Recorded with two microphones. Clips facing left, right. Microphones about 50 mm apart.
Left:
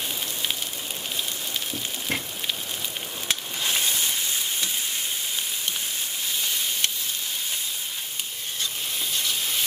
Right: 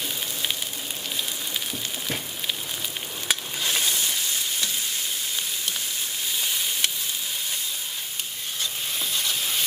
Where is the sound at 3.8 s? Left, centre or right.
Left.